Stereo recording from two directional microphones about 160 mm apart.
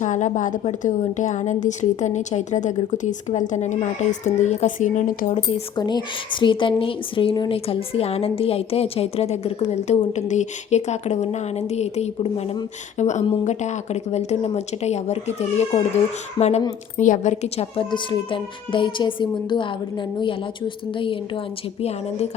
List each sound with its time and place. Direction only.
0.0 s a woman's voice: 50° left (ahead or behind)
5.7 s a woman's voice: 25° left (ahead or behind)